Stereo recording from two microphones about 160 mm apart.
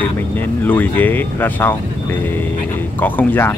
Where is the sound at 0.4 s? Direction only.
10° left (ahead or behind).